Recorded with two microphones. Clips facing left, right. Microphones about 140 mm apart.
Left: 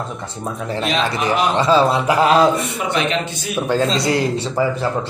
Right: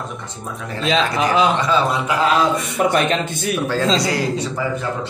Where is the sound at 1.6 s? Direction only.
30° left (ahead or behind).